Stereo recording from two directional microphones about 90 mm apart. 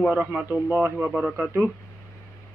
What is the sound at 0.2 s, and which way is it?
A man's voice, 15° right (ahead or behind).